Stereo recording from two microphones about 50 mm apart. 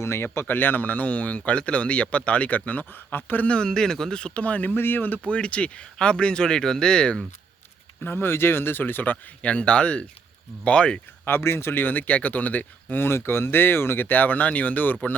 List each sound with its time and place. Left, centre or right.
0.0 s speech: left
0.4 s speech: left
3.4 s speech: centre
4.4 s speech: left
4.7 s speech: left
5.3 s speech: left
8.0 s speech: left
11.3 s speech: left
13.0 s speech: left